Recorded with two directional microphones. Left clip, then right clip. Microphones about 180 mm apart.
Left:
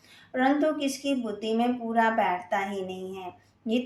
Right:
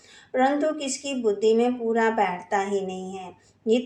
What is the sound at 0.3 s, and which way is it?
A woman's voice, 30° right (ahead or behind).